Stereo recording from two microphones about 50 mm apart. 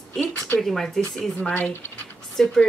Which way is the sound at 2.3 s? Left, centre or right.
Centre.